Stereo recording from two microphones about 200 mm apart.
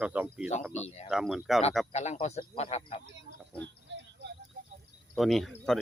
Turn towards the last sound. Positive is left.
turn(degrees=0)  # may be behind; listen again after turning